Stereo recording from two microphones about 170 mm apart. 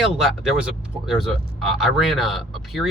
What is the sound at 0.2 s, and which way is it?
Speech, centre (ahead or behind).